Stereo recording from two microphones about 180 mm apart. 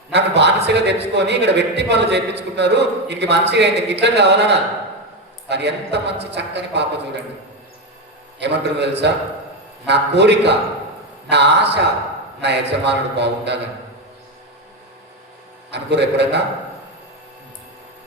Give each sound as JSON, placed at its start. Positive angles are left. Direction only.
{"t": 0.1, "sound": "a man's voice", "side_deg": -70}
{"t": 8.4, "sound": "a man's voice", "side_deg": -70}
{"t": 15.7, "sound": "a man's voice", "side_deg": -70}